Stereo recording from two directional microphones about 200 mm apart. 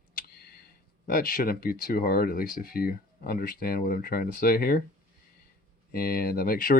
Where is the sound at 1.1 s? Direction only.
45° left (ahead or behind).